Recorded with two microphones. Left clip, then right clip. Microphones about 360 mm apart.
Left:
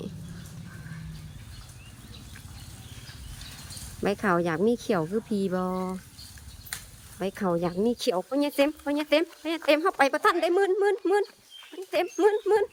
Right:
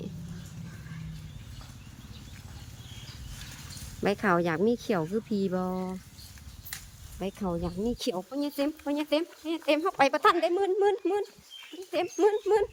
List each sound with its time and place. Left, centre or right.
4.0 s speech: centre
6.7 s a sound: centre
7.2 s speech: centre